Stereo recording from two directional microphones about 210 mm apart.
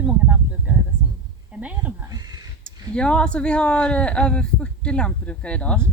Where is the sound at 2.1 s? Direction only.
20° right (ahead or behind).